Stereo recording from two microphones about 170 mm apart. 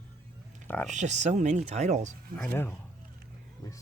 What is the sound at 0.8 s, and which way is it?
Speech, 45° right (ahead or behind).